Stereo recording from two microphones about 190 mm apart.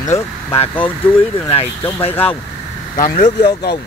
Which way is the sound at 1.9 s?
10° left (ahead or behind).